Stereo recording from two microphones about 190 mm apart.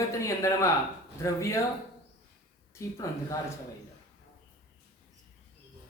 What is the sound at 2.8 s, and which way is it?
Speech, 15° left (ahead or behind).